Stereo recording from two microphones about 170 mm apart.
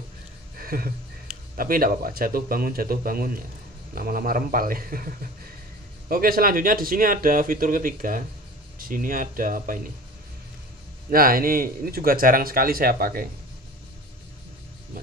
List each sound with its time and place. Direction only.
0.6 s a sound: 60° right (ahead or behind)
1.6 s speech: 55° right (ahead or behind)
11.1 s speech: 60° right (ahead or behind)